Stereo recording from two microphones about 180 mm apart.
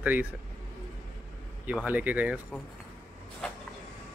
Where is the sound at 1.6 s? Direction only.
10° right (ahead or behind).